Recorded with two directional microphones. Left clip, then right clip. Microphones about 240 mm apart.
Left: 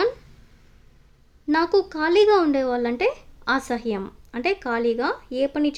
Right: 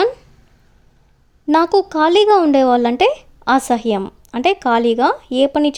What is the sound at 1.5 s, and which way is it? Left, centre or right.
A woman's voice, right.